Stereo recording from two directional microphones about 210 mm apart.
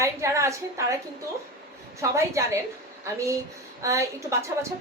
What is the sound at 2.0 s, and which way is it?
Speech, 15° right (ahead or behind).